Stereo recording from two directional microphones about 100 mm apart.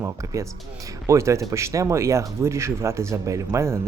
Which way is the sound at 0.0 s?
30° right (ahead or behind).